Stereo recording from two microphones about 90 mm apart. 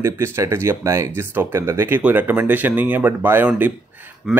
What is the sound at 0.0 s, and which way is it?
Speech, 30° right (ahead or behind).